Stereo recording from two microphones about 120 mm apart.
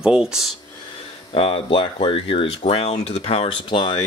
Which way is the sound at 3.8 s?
40° left (ahead or behind).